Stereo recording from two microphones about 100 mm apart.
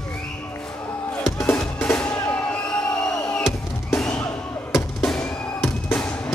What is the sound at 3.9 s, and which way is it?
Music, 10° left (ahead or behind).